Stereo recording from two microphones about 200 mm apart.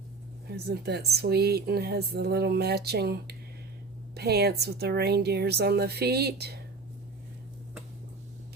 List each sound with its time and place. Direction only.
0.4 s speech: 55° right (ahead or behind)